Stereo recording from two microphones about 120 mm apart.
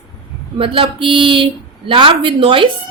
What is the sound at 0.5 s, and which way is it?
A woman's voice, 50° right (ahead or behind).